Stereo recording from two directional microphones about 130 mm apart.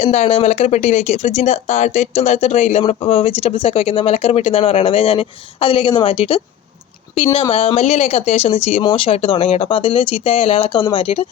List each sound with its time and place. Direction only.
0.0 s speech: 55° left (ahead or behind)
2.8 s speech: 45° left (ahead or behind)
7.5 s speech: 50° left (ahead or behind)